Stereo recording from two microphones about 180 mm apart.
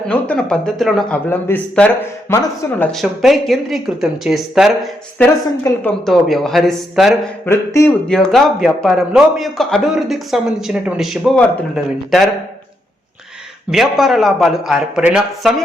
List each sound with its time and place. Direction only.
0.1 s a man's voice: 5° left (ahead or behind)
2.9 s a man's voice: centre (ahead or behind)
5.7 s speech: 15° left (ahead or behind)
6.1 s a man's voice: centre (ahead or behind)
7.4 s speech: 15° left (ahead or behind)
8.0 s a man's voice: 5° left (ahead or behind)
13.7 s a man's voice: centre (ahead or behind)